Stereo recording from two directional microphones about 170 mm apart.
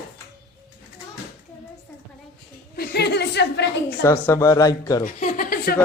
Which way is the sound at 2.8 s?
75° left (ahead or behind).